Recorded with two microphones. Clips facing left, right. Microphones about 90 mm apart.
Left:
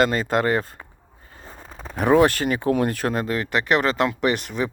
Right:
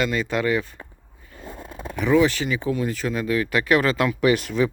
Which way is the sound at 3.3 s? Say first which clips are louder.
Right 4 dB; 25° left (ahead or behind).